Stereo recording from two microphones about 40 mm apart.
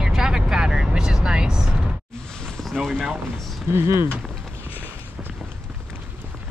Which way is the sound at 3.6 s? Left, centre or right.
Right.